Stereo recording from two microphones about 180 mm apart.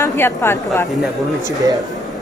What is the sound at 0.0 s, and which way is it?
Speech, 15° left (ahead or behind).